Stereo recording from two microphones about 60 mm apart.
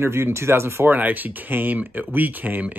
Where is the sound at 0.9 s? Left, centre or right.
Right.